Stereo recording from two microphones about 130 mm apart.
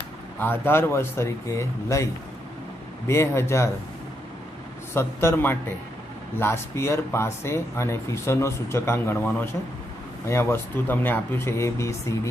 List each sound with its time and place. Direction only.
0.4 s speech: 15° left (ahead or behind)
3.1 s speech: 20° left (ahead or behind)
4.9 s a man's voice: 20° left (ahead or behind)